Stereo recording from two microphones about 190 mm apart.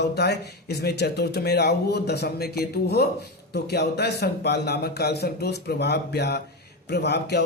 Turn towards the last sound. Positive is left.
turn(degrees=60)  # may be behind; listen again after turning